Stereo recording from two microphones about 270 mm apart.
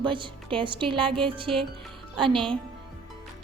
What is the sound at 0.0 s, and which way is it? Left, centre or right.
Speech, centre.